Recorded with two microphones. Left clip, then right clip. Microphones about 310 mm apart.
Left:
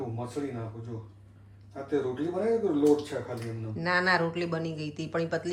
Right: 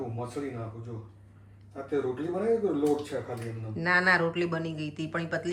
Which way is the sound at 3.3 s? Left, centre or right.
Centre.